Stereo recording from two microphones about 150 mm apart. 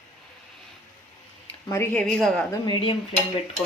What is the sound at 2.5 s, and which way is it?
Speech, 30° left (ahead or behind).